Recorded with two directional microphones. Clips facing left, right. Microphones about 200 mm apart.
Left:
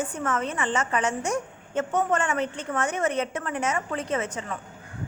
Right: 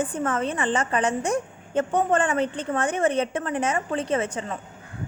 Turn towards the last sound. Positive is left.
turn(degrees=-30)  # may be behind; listen again after turning